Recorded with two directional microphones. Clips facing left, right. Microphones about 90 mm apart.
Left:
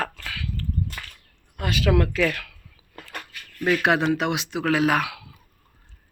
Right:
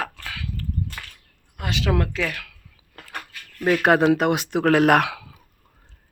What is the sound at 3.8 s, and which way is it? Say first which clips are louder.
Speech: right 6 dB; 45° right (ahead or behind).